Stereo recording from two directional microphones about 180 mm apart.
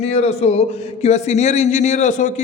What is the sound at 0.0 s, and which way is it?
Speech, 35° left (ahead or behind).